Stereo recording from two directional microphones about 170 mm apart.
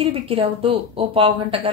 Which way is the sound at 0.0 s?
35° right (ahead or behind).